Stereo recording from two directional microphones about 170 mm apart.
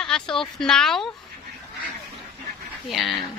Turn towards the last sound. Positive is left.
turn(degrees=0)  # may be behind; listen again after turning